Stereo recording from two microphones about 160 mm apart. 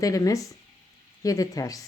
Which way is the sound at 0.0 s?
20° left (ahead or behind).